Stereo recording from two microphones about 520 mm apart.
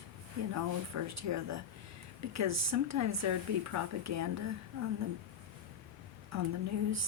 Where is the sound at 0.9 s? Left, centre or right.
Right.